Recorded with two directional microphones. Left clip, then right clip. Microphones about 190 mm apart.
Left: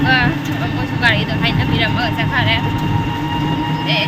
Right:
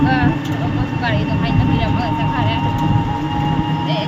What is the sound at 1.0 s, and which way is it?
Speech, centre (ahead or behind).